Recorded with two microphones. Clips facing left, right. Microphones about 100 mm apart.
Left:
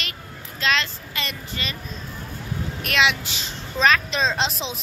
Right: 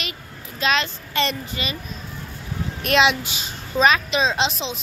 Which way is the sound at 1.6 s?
15° right (ahead or behind).